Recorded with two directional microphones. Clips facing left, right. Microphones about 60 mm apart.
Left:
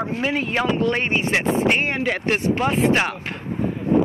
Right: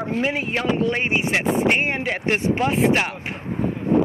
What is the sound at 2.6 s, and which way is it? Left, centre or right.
Speech, centre.